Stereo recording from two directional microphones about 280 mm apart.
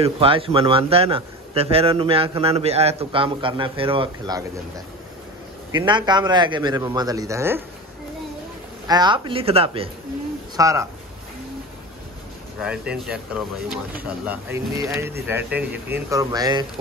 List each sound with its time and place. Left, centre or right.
0.0 s a man's voice: centre
8.8 s a man's voice: centre
12.5 s a man's voice: centre